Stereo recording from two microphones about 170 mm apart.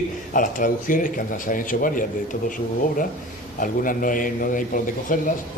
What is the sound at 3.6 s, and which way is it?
Speech, 55° left (ahead or behind).